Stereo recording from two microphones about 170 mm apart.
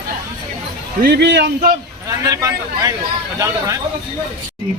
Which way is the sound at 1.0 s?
80° right.